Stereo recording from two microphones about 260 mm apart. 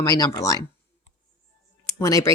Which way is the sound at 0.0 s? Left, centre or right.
Centre.